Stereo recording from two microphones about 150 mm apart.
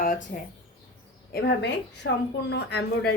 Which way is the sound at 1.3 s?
90° left.